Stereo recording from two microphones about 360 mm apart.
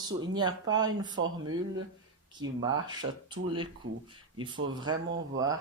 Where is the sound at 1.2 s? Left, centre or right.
Right.